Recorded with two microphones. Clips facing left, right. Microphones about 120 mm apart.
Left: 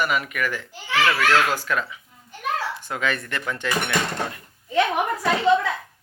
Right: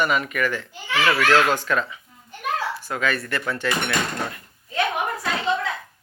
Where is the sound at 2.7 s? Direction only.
20° left (ahead or behind).